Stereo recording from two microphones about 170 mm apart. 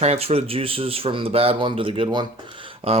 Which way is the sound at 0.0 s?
40° right (ahead or behind).